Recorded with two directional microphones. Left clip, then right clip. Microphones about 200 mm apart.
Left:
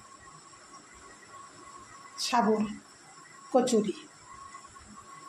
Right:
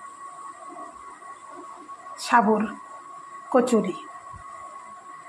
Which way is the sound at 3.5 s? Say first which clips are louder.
Right 5 dB; 15° right (ahead or behind).